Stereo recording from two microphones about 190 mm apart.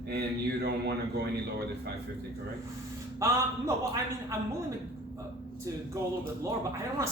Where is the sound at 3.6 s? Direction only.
15° right (ahead or behind).